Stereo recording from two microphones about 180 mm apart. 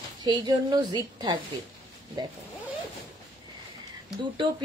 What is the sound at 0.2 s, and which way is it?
A woman's voice, 25° right (ahead or behind).